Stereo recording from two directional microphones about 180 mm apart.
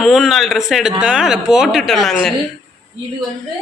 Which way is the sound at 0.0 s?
Centre (ahead or behind).